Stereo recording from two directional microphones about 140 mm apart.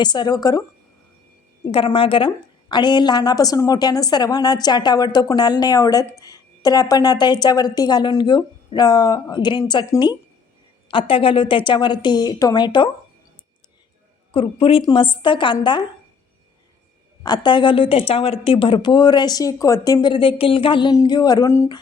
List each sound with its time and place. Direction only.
0.0 s a woman's voice: 30° left (ahead or behind)
1.7 s a woman's voice: 40° left (ahead or behind)
10.9 s a woman's voice: 40° left (ahead or behind)
14.3 s a woman's voice: 40° left (ahead or behind)
17.2 s a woman's voice: 30° left (ahead or behind)